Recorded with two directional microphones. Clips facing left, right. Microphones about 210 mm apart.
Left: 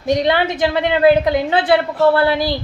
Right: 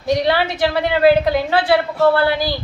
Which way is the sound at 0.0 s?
20° left (ahead or behind).